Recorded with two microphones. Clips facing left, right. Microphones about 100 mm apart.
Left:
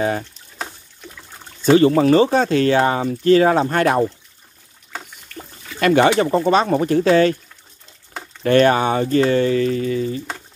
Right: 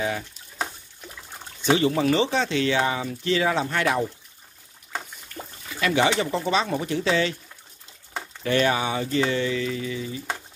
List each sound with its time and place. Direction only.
1.6 s speech: 45° left (ahead or behind)
5.8 s speech: 50° left (ahead or behind)
8.5 s speech: 55° left (ahead or behind)